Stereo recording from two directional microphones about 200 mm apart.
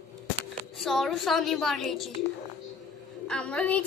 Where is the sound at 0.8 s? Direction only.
Centre (ahead or behind).